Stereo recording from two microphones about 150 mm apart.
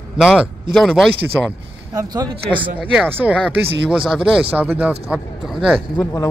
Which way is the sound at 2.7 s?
10° right (ahead or behind).